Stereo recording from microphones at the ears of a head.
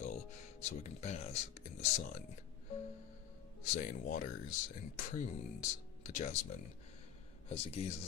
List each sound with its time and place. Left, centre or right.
0.0 s music: left
3.6 s speech: left